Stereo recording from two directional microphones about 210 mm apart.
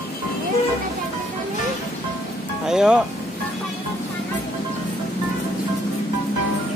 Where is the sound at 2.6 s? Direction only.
5° right (ahead or behind).